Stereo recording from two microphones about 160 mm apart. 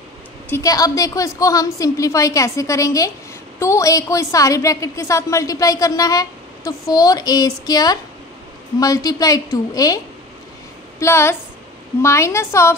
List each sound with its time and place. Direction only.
0.5 s a woman's voice: 20° left (ahead or behind)